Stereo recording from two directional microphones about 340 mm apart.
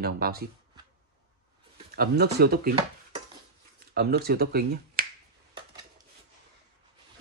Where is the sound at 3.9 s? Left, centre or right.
Right.